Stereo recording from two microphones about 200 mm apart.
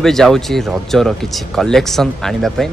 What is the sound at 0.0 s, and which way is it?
Speech, centre (ahead or behind).